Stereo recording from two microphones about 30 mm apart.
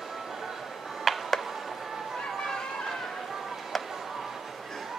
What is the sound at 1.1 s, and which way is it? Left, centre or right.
Music, centre.